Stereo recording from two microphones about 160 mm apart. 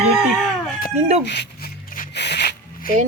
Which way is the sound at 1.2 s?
90° left.